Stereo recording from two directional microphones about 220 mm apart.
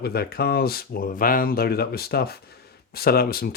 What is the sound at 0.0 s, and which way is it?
Speech, 45° left (ahead or behind).